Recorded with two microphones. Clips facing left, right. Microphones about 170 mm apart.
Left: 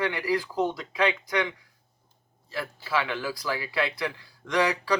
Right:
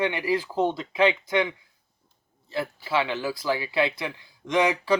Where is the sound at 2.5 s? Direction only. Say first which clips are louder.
Right 3 dB; 25° right (ahead or behind).